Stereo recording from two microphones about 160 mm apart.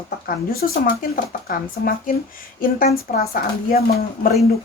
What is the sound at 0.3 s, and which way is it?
Speech, 60° left (ahead or behind).